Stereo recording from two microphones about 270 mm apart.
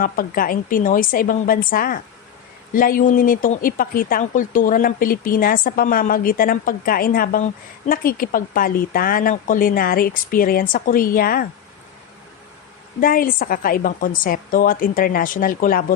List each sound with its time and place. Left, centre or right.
0.0 s speech: left
13.0 s speech: left